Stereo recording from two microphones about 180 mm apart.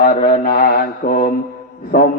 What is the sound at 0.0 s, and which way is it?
Mantra, 55° left (ahead or behind).